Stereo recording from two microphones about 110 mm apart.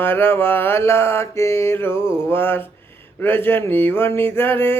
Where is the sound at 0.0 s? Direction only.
20° left (ahead or behind).